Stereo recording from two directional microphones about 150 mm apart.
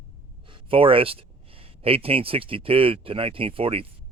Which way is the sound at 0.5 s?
35° right (ahead or behind).